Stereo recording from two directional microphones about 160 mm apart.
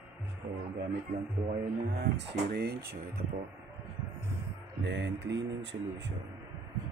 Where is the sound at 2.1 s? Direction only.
85° right.